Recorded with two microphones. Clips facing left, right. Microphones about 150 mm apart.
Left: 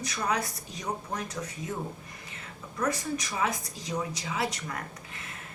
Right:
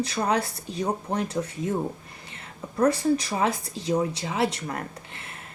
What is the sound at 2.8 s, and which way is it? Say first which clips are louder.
A woman's voice: right 9 dB; 30° right (ahead or behind).